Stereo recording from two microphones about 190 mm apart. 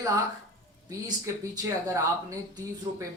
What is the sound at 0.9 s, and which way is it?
Speech, 15° right (ahead or behind).